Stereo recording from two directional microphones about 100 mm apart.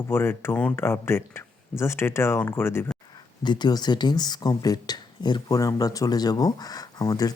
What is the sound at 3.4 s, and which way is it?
Speech, 50° left (ahead or behind).